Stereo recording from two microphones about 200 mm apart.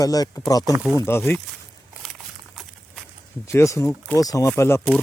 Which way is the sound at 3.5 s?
15° left (ahead or behind).